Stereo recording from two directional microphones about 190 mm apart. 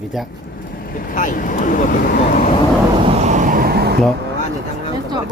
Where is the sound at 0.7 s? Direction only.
50° left (ahead or behind).